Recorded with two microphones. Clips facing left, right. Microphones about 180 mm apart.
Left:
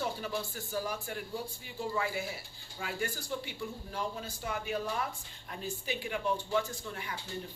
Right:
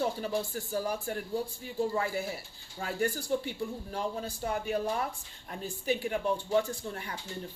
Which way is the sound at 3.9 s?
35° right (ahead or behind).